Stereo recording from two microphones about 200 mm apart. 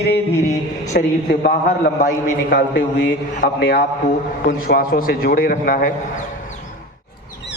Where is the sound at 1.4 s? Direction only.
50° left (ahead or behind).